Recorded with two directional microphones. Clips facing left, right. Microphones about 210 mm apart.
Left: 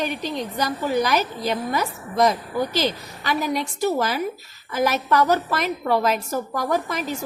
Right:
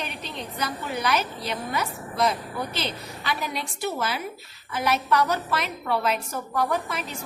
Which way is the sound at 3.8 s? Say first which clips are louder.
Left 6 dB; 40° left (ahead or behind).